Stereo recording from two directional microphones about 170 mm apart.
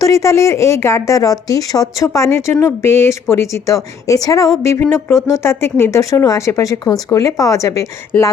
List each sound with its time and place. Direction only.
0.0 s a woman's voice: 20° left (ahead or behind)